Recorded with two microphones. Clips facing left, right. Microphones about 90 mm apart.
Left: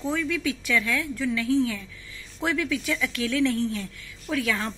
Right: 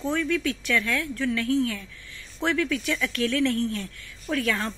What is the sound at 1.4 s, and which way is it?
A woman's voice, 15° left (ahead or behind).